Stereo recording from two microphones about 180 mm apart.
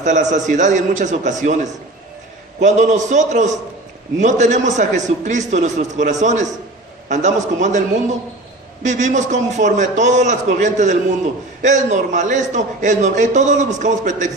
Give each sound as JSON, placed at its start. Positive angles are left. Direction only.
{"t": 0.0, "sound": "a man's voice", "side_deg": -45}
{"t": 8.8, "sound": "a man's voice", "side_deg": -40}